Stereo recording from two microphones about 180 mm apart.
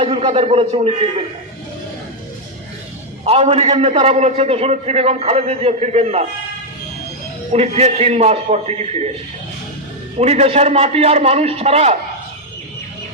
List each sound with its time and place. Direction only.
0.0 s a man's voice: 30° right (ahead or behind)
3.2 s a man's voice: 35° right (ahead or behind)
7.5 s a man's voice: 35° right (ahead or behind)
10.2 s a man's voice: 35° right (ahead or behind)